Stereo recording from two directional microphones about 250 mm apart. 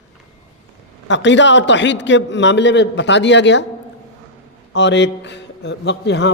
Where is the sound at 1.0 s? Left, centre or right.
Left.